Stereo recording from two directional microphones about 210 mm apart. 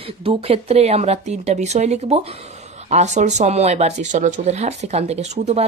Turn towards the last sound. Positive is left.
turn(degrees=-30)  # may be behind; listen again after turning